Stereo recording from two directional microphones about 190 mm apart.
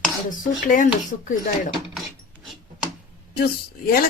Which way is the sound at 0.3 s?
45° left (ahead or behind).